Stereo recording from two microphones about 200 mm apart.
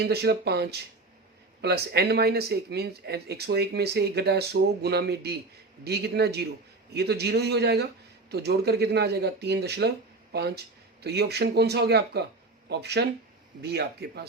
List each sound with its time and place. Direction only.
0.0 s speech: 55° right (ahead or behind)